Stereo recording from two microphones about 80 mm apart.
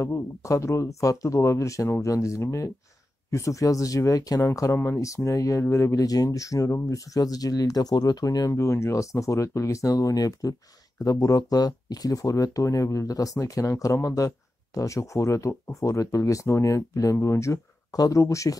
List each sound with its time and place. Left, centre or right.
0.0 s speech: left
4.7 s speech: left
8.5 s speech: left